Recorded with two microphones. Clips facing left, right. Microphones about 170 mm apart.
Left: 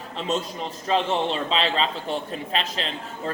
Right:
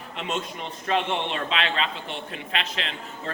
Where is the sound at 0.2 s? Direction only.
35° left (ahead or behind).